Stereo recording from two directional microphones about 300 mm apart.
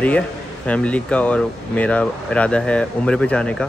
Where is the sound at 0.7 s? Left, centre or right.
Centre.